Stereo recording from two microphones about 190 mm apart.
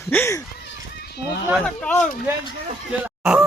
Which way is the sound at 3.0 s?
5° right (ahead or behind).